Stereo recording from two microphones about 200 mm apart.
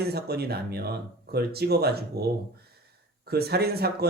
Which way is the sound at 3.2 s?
50° right (ahead or behind).